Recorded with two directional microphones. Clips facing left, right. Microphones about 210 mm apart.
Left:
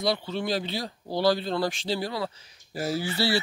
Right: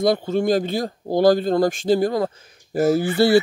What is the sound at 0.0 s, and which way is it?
Speech, 50° right (ahead or behind).